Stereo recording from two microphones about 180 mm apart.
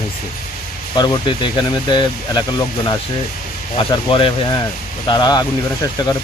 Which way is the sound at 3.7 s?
30° left (ahead or behind).